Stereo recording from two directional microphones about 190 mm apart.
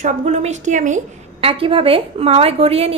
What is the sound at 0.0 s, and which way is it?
A woman's voice, 35° right (ahead or behind).